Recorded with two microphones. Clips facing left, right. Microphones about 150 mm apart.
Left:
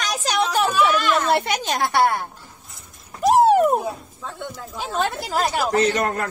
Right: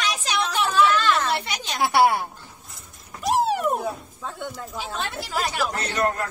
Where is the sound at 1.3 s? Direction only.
50° left (ahead or behind).